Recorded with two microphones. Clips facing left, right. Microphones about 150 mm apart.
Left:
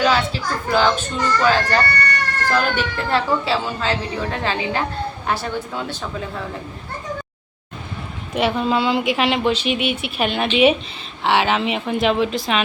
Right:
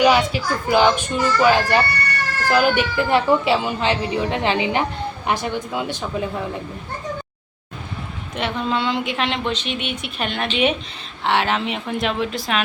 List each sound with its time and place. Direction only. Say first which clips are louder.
0.0 s speech: right 3 dB; 15° right (ahead or behind)
8.4 s a woman's voice: left 4 dB; 10° left (ahead or behind)